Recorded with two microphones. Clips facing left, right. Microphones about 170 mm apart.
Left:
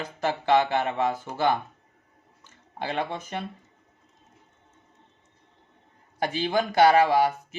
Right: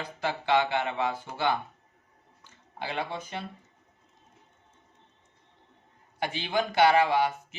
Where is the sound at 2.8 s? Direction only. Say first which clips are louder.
Left 4 dB; 45° left (ahead or behind).